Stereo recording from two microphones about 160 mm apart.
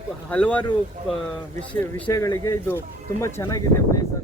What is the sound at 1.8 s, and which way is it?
Speech, 20° left (ahead or behind).